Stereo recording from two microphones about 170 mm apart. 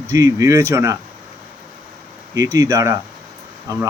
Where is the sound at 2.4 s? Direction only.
20° right (ahead or behind).